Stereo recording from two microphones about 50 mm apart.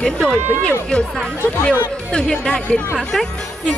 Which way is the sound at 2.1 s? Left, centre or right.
Centre.